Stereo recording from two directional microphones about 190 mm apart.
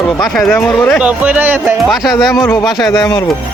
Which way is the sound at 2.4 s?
10° left (ahead or behind).